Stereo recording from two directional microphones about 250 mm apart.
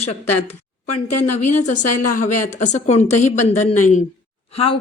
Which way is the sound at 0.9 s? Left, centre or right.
Left.